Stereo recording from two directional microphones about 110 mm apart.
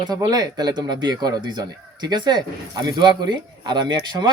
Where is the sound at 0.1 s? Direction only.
35° right (ahead or behind).